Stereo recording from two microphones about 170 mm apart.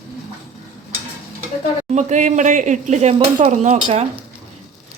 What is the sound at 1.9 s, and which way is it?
Speech, 45° right (ahead or behind).